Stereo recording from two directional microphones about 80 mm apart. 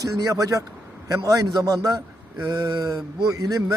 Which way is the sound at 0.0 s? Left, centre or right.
Right.